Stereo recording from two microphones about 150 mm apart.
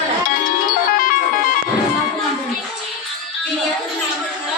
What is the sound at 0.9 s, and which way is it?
Music, 65° left (ahead or behind).